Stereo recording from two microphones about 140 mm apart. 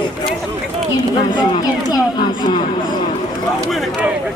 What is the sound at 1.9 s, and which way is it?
Speech, 30° left (ahead or behind).